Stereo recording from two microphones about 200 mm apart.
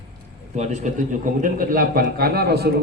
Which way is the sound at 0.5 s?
35° right (ahead or behind).